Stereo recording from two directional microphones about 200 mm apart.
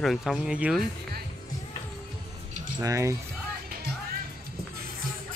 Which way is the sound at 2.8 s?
15° right (ahead or behind).